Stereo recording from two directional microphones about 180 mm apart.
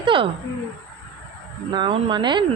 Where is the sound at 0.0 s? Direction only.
30° right (ahead or behind).